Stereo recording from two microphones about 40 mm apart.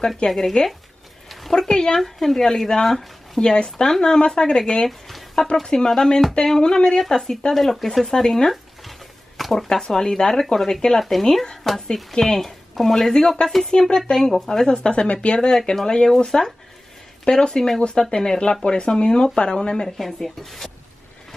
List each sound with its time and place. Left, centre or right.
0.3 s speech: centre
4.8 s a sound: centre
5.6 s speech: centre
8.1 s speech: centre
13.7 s speech: centre
14.8 s speech: left
20.0 s speech: centre